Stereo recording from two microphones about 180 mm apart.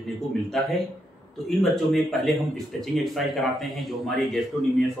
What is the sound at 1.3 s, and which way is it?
Speech, centre (ahead or behind).